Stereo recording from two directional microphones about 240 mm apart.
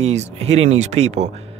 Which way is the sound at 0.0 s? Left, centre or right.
Right.